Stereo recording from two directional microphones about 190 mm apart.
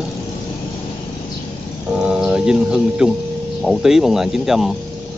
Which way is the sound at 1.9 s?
5° right (ahead or behind).